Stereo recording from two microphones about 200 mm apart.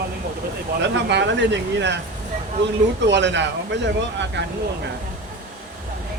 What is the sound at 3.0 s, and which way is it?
Speech, 60° right (ahead or behind).